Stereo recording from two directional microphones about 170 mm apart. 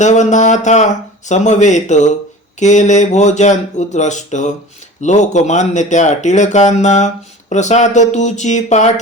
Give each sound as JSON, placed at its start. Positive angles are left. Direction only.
{"t": 0.0, "sound": "speech", "side_deg": 45}